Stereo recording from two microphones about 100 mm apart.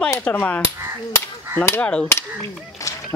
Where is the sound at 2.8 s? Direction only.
30° left (ahead or behind).